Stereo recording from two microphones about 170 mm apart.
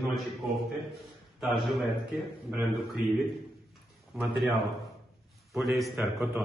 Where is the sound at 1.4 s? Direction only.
Centre (ahead or behind).